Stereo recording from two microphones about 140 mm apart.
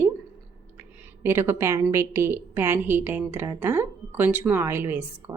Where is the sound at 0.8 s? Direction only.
15° right (ahead or behind).